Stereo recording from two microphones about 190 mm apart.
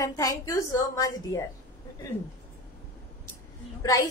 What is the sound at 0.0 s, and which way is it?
A woman's voice, 15° left (ahead or behind).